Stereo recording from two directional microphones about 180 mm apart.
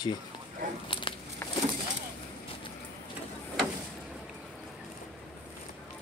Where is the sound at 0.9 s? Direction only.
30° left (ahead or behind).